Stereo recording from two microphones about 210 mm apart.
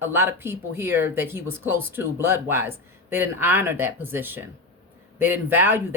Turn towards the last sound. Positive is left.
turn(degrees=-10)  # may be behind; listen again after turning